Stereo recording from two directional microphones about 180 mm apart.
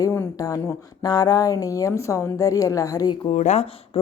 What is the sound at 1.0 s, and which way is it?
A woman's voice, 20° left (ahead or behind).